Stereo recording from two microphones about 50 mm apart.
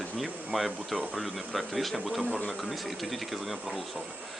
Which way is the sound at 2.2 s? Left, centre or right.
Left.